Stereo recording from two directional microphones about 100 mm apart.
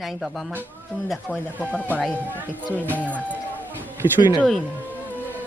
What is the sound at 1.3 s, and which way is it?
Speech, 15° left (ahead or behind).